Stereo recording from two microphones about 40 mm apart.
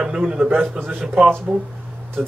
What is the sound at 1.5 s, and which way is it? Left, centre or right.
Speech, centre.